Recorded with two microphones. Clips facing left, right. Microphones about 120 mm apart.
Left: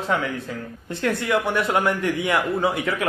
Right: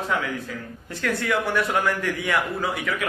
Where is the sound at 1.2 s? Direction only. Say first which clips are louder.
Even; 20° left (ahead or behind).